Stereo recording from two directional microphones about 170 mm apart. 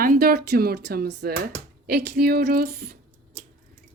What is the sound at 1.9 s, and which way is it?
Speech, 70° right (ahead or behind).